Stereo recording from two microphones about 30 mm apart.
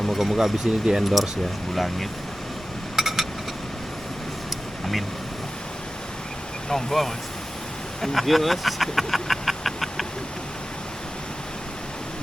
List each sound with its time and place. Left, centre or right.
0.2 s speech: centre
1.7 s speech: centre
2.9 s a sound: centre
6.7 s speech: centre